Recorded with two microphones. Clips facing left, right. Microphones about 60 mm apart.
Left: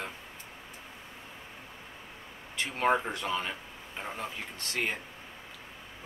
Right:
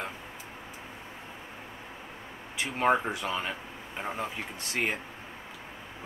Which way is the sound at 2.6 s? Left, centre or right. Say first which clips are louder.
Right 2 dB; centre.